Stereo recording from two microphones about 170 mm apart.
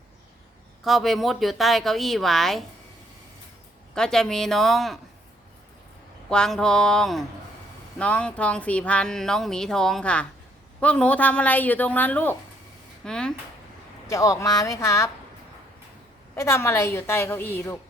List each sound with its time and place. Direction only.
0.9 s speech: centre (ahead or behind)
3.9 s speech: 5° left (ahead or behind)
6.3 s speech: 5° left (ahead or behind)
14.1 s speech: 20° left (ahead or behind)
16.3 s speech: 15° left (ahead or behind)